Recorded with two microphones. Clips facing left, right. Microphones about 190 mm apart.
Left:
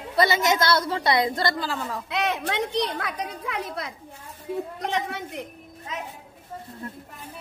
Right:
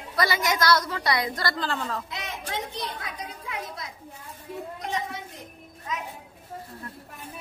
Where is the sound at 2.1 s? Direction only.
70° left (ahead or behind).